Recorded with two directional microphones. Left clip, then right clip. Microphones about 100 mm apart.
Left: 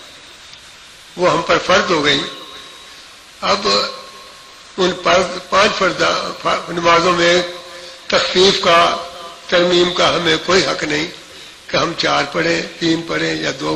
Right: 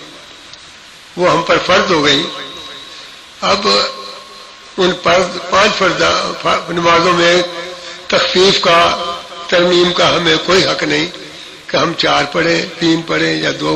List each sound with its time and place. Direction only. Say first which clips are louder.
1.2 s a man's voice: right 3 dB; 50° left (ahead or behind)
1.9 s a man's voice: right 3 dB; 55° left (ahead or behind)
3.4 s a man's voice: right 3 dB; 45° left (ahead or behind)
5.5 s a man's voice: right 3 dB; 55° left (ahead or behind); by 9.0 s 35° left (ahead or behind)
9.5 s a man's voice: right 3 dB; 50° left (ahead or behind)
11.7 s a man's voice: right 3 dB; 50° left (ahead or behind)